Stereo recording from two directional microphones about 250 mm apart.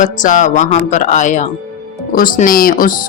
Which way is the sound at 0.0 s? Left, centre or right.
Left.